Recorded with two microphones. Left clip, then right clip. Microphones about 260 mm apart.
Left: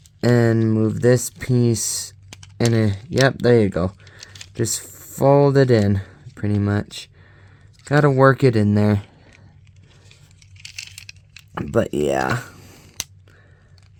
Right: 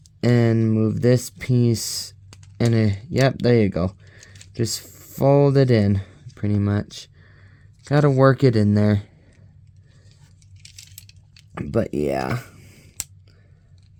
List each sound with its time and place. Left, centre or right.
0.2 s speech: centre
2.6 s speech: centre
11.5 s speech: centre